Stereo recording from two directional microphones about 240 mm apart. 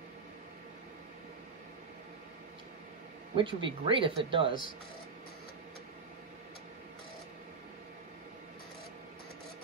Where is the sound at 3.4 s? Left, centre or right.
Right.